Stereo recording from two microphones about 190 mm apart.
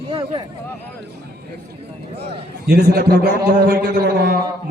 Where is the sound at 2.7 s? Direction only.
55° right (ahead or behind).